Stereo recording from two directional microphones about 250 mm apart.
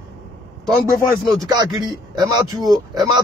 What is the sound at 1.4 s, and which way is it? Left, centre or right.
Speech, centre.